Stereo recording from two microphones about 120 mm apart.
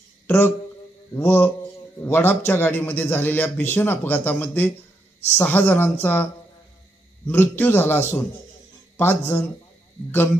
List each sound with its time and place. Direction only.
1.1 s a man's voice: 15° left (ahead or behind)
7.2 s a man's voice: 15° left (ahead or behind)